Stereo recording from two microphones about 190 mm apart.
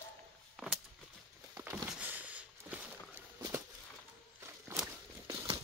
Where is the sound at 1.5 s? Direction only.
15° right (ahead or behind).